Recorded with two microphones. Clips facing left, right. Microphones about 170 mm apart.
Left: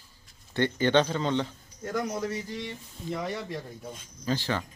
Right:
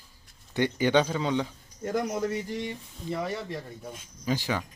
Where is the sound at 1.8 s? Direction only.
20° right (ahead or behind).